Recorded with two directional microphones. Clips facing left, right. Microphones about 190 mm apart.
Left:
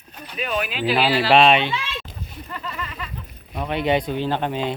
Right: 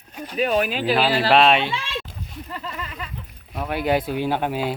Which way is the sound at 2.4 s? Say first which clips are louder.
Left 1 dB; 25° right (ahead or behind).